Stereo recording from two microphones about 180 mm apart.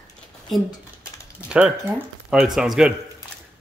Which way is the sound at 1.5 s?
5° right (ahead or behind).